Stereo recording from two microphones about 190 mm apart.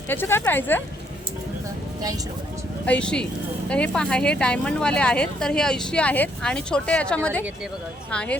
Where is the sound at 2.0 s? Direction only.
20° right (ahead or behind).